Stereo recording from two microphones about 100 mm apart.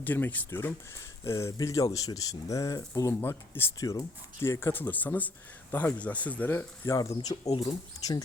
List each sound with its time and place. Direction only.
0.0 s speech: 20° left (ahead or behind); by 3.2 s 35° left (ahead or behind)
3.2 s speech: 20° left (ahead or behind)
3.8 s speech: 35° left (ahead or behind); by 6.7 s 20° left (ahead or behind)
6.8 s speech: 30° left (ahead or behind)